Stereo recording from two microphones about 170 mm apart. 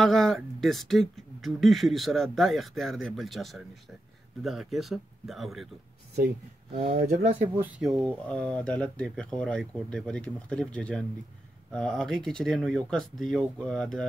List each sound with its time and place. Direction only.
0.0 s speech: centre (ahead or behind)
6.9 s speech: 65° right (ahead or behind)
7.5 s speech: 10° right (ahead or behind)
8.3 s speech: 5° left (ahead or behind)